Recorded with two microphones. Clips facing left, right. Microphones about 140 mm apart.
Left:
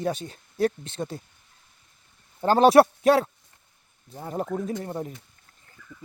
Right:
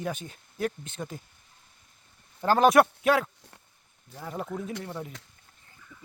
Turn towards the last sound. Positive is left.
turn(degrees=40)  # may be behind; listen again after turning